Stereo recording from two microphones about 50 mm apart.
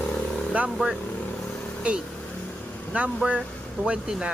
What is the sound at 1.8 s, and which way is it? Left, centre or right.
Speech, right.